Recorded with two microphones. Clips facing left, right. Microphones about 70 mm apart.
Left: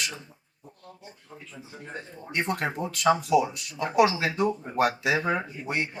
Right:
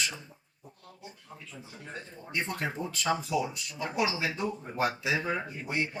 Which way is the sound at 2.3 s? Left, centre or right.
Left.